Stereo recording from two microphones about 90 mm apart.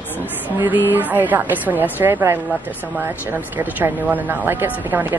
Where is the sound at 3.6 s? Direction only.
20° right (ahead or behind).